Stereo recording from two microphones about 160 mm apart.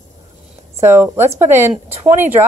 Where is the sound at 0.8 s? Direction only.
15° right (ahead or behind).